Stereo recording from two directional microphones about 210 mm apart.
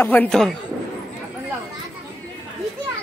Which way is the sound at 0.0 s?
5° left (ahead or behind).